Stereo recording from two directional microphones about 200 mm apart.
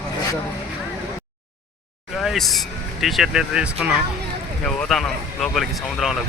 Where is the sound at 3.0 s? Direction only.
Centre (ahead or behind).